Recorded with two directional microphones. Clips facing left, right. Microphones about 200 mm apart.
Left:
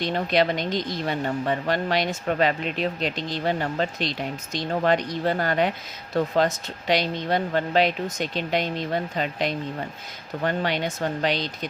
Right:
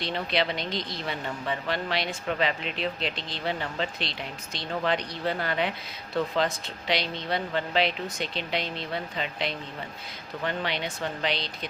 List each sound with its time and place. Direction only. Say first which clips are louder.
0.0 s speech: left 6 dB; 45° left (ahead or behind)